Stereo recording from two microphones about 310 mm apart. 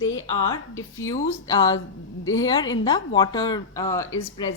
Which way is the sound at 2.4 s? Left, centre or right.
Centre.